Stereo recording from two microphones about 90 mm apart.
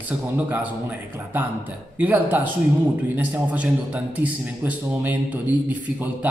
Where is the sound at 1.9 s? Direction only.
20° right (ahead or behind).